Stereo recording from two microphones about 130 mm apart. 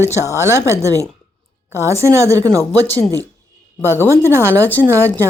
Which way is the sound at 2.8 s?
15° left (ahead or behind).